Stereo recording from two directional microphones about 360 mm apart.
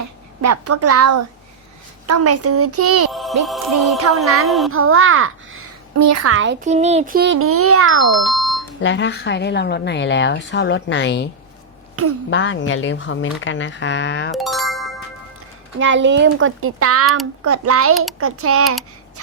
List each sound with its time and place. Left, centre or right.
0.4 s a child's voice: right
3.1 s speech: centre
3.4 s music: centre
4.7 s a child's voice: right
6.0 s a child's voice: right
6.7 s a child's voice: centre; by 7.9 s right
8.0 s music: centre
8.8 s a woman's voice: left
12.0 s a child's voice: right
12.3 s speech: left
14.3 s music: centre
15.8 s a child's voice: right